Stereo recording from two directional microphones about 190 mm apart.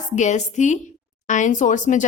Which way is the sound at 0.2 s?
40° left (ahead or behind).